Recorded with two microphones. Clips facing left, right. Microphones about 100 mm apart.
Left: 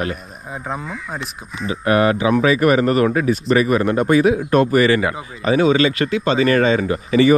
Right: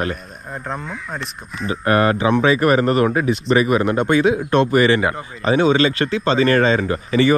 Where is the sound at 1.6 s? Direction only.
40° right (ahead or behind).